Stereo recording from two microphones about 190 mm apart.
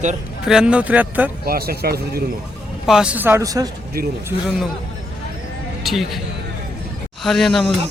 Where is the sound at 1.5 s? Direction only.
55° right (ahead or behind).